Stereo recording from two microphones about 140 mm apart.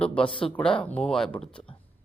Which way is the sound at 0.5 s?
10° left (ahead or behind).